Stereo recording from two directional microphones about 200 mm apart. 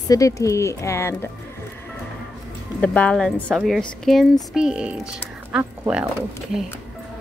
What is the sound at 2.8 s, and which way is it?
A woman's voice, 5° left (ahead or behind).